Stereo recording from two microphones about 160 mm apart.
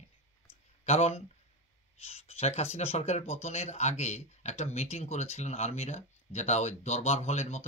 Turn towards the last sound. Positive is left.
turn(degrees=45)  # may be behind; listen again after turning